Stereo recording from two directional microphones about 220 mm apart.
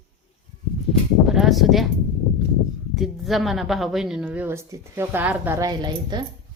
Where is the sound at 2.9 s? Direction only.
Centre (ahead or behind).